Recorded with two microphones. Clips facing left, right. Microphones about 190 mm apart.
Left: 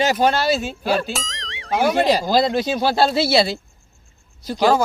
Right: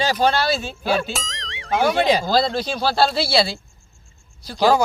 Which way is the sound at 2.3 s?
15° left (ahead or behind).